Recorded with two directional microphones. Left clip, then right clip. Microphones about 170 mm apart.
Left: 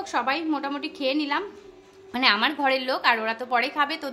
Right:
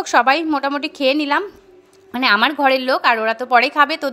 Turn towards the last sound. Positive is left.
turn(degrees=-40)  # may be behind; listen again after turning